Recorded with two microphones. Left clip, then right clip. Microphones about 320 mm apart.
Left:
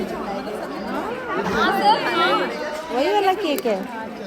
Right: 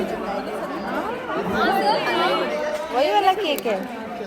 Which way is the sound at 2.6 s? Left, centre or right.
Left.